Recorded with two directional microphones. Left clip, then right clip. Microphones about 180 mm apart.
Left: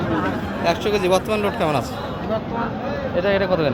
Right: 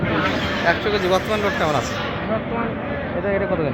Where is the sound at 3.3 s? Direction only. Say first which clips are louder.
Left 2 dB; 35° left (ahead or behind).